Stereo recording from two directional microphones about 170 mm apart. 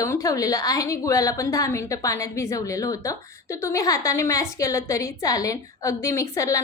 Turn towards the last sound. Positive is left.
turn(degrees=20)  # may be behind; listen again after turning